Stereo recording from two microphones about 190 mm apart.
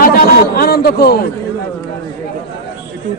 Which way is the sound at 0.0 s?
55° left (ahead or behind).